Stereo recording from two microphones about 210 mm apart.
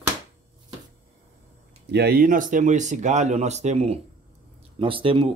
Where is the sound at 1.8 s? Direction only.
50° right (ahead or behind).